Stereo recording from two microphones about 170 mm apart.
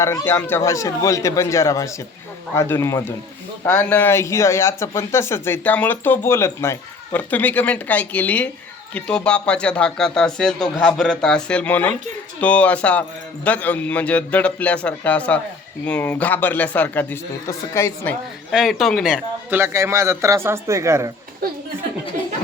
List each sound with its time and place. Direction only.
0.0 s a man's voice: 15° left (ahead or behind)
18.5 s a man's voice: centre (ahead or behind); by 21.1 s 15° right (ahead or behind)